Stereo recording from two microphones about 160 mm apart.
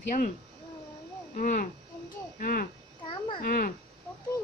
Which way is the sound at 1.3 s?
55° left (ahead or behind).